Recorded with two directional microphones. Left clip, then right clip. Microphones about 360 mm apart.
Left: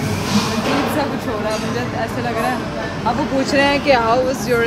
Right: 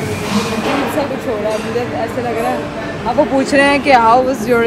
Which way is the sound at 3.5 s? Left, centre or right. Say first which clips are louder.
Right 2 dB; centre.